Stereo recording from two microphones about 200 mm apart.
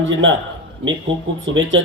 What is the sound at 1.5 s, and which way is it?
Speech, 70° right (ahead or behind).